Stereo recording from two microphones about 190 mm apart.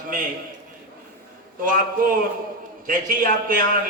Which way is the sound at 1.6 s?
45° right (ahead or behind).